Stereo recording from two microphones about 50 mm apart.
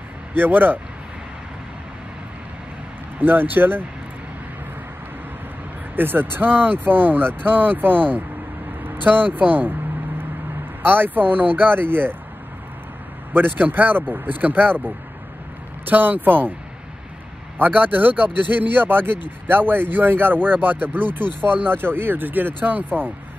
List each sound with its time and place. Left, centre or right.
0.3 s a man's voice: right
3.2 s a man's voice: right
5.9 s a man's voice: right
8.8 s vehicle: right
10.9 s speech: right
13.3 s a man's voice: right
17.6 s a man's voice: right